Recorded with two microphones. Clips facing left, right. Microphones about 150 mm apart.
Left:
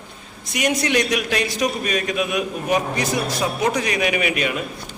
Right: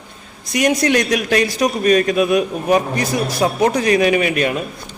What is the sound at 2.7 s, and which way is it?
Speech, 60° right (ahead or behind).